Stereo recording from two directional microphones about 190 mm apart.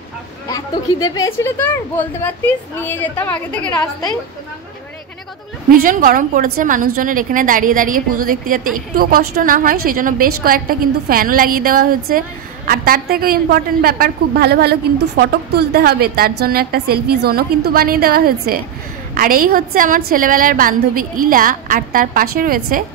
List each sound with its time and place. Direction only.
1.0 s a woman's voice: 20° left (ahead or behind)
5.7 s a woman's voice: 45° right (ahead or behind)